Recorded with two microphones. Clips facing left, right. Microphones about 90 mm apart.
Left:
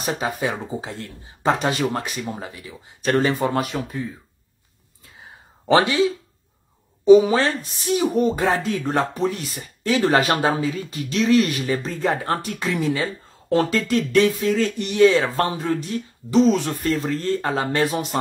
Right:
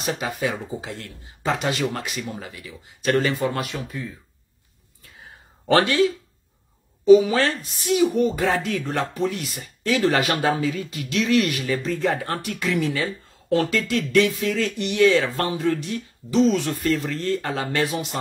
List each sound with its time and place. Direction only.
0.0 s speech: 30° left (ahead or behind)
1.7 s speech: 25° left (ahead or behind)
3.1 s speech: 40° left (ahead or behind)
5.7 s speech: 20° left (ahead or behind)
17.8 s speech: 45° left (ahead or behind)